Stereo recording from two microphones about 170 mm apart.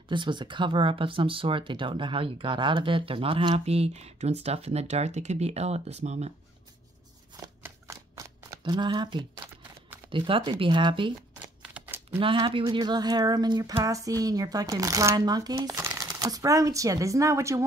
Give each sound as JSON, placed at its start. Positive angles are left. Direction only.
{"t": 0.1, "sound": "speech", "side_deg": -25}
{"t": 7.3, "sound": "shuffling cards", "side_deg": -20}
{"t": 10.1, "sound": "speech", "side_deg": -30}
{"t": 11.4, "sound": "shuffling cards", "side_deg": -10}
{"t": 12.2, "sound": "speech", "side_deg": -30}